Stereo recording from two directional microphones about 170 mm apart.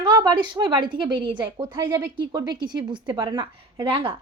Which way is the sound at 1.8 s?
15° right (ahead or behind).